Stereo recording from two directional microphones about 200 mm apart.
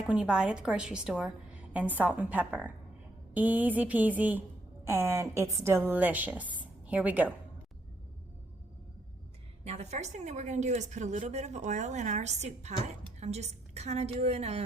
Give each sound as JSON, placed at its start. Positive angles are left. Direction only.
{"t": 0.1, "sound": "a woman's voice", "side_deg": -5}
{"t": 9.6, "sound": "a woman's voice", "side_deg": -35}